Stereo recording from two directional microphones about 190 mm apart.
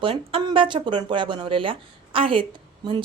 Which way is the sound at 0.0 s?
30° right (ahead or behind).